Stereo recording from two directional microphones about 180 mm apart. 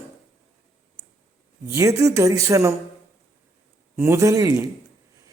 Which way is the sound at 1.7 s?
15° right (ahead or behind).